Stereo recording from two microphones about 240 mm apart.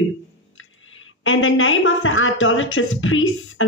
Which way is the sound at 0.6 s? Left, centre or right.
Left.